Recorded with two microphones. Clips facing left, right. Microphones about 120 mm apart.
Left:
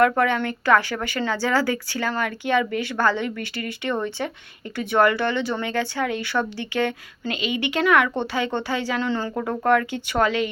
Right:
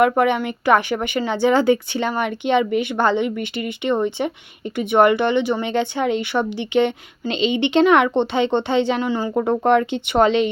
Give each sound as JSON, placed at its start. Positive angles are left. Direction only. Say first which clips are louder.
{"t": 0.0, "sound": "speech", "louder": "right 3 dB", "side_deg": -20}
{"t": 9.4, "sound": "speech", "louder": "right 4 dB", "side_deg": -25}